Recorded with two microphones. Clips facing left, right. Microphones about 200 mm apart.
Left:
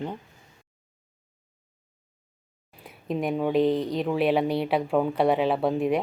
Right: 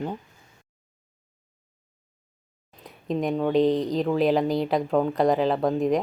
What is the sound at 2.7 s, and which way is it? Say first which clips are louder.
Speech: right 2 dB; 5° left (ahead or behind).